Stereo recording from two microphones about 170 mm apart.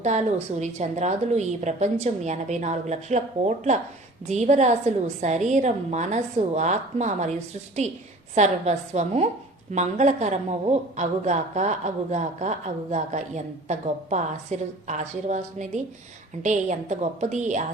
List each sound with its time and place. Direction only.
0.0 s a woman's voice: 45° right (ahead or behind)
8.4 s a woman's voice: 40° right (ahead or behind)